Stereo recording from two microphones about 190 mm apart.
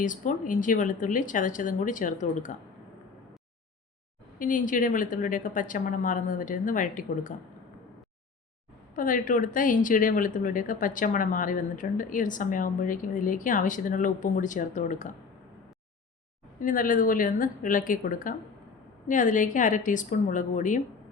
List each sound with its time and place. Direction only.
0.0 s speech: 45° left (ahead or behind)
4.4 s speech: 45° left (ahead or behind)
9.0 s speech: 45° left (ahead or behind)
16.6 s speech: 45° left (ahead or behind)